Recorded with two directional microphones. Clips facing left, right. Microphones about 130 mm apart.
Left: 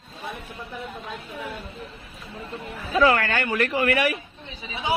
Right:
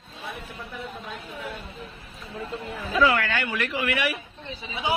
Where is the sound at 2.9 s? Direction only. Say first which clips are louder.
Left 3 dB; 45° left (ahead or behind).